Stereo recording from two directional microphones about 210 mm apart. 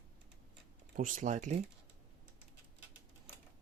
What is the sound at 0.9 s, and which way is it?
Speech, 40° right (ahead or behind).